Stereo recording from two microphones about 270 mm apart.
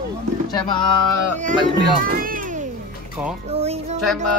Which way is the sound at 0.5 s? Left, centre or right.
Centre.